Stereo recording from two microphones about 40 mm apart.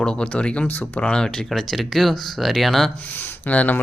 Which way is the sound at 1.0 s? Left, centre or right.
Left.